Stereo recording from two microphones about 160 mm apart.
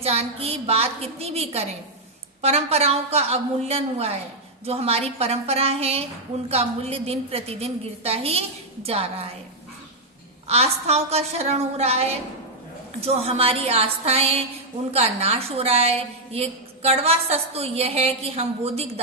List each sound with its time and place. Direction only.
0.0 s a woman's voice: 40° right (ahead or behind)
10.4 s a woman's voice: 40° right (ahead or behind)